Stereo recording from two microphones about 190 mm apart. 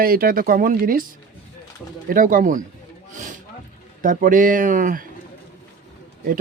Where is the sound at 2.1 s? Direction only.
45° right (ahead or behind).